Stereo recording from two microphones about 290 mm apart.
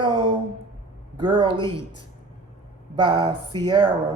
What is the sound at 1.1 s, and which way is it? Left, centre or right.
Speech, centre.